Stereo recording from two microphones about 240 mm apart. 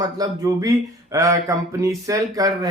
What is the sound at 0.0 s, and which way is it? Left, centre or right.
Speech, centre.